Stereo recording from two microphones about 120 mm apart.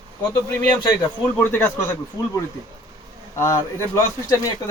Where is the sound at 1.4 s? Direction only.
15° left (ahead or behind).